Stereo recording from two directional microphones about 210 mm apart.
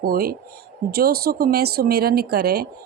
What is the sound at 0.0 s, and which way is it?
A woman's voice, 45° right (ahead or behind).